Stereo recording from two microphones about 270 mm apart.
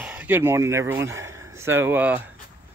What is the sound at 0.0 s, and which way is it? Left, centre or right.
Speech, centre.